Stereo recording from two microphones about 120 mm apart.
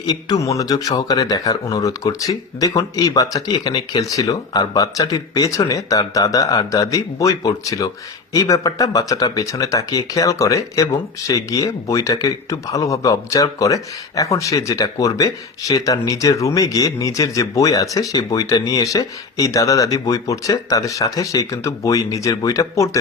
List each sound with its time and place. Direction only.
0.0 s a man's voice: 35° left (ahead or behind)